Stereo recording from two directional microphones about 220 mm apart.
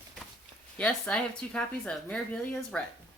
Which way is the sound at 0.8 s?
5° left (ahead or behind).